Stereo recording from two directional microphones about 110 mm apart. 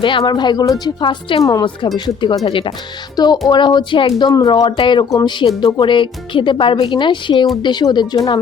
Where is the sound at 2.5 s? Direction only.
55° left (ahead or behind).